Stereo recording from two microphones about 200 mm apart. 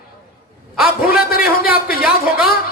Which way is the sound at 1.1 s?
50° left (ahead or behind).